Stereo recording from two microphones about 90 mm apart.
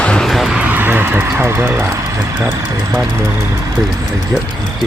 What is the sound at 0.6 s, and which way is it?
Speech, 20° right (ahead or behind).